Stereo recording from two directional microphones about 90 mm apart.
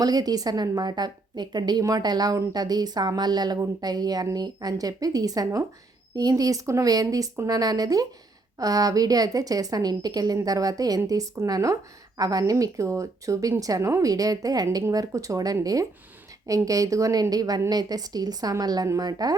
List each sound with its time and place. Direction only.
0.0 s speech: 45° right (ahead or behind)